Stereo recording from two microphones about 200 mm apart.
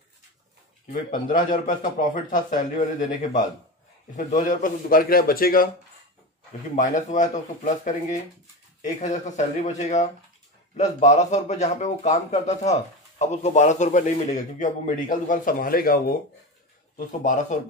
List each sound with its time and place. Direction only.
0.9 s a man's voice: 40° left (ahead or behind)
6.7 s speech: 40° left (ahead or behind)